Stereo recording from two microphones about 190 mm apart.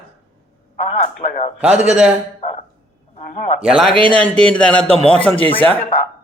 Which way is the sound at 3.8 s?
5° left (ahead or behind).